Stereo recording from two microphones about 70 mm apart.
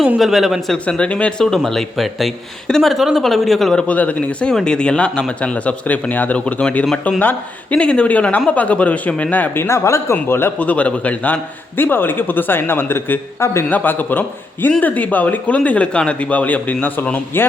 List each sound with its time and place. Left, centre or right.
0.2 s speech: centre
0.9 s speech: centre
1.7 s speech: centre
3.8 s speech: left
9.6 s speech: left
10.6 s speech: left
13.7 s speech: left